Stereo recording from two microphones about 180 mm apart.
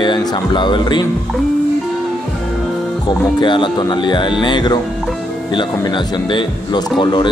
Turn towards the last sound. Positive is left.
turn(degrees=25)  # may be behind; listen again after turning